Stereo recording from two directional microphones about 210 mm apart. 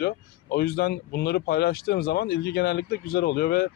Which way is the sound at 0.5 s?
45° left (ahead or behind).